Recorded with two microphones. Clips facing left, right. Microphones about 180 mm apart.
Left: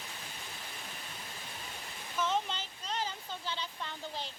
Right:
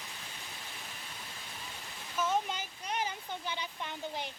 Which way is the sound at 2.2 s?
10° right (ahead or behind).